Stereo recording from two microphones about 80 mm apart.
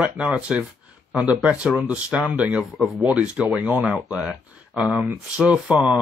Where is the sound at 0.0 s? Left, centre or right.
Centre.